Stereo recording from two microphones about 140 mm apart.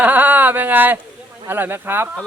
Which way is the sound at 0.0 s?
10° right (ahead or behind).